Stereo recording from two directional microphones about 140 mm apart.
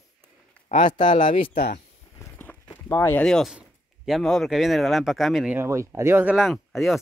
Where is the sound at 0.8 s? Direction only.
35° left (ahead or behind).